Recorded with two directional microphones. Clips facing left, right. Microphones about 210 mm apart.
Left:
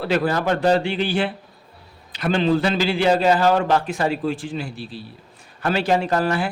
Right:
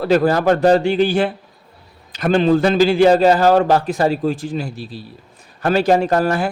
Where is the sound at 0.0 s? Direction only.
45° right (ahead or behind).